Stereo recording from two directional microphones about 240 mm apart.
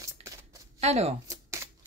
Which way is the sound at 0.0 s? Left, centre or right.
Centre.